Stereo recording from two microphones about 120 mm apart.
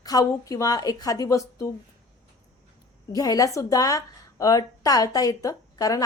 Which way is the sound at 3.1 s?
30° left (ahead or behind).